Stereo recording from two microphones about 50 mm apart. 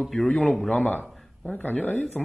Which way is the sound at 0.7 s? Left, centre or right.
Left.